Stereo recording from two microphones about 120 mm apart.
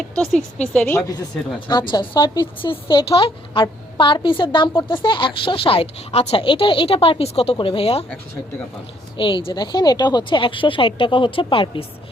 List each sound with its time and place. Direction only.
0.2 s a woman's voice: 5° left (ahead or behind)
1.7 s speech: 40° left (ahead or behind)
9.1 s speech: 45° left (ahead or behind)